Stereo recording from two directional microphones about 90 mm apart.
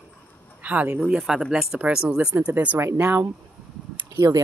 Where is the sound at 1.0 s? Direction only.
10° right (ahead or behind).